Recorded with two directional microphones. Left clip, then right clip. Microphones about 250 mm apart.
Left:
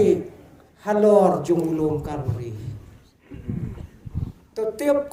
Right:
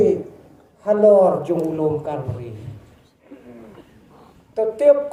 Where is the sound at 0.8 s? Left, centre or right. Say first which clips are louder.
Right 5 dB; left.